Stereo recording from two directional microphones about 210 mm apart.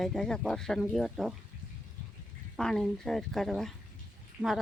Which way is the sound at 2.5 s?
Centre (ahead or behind).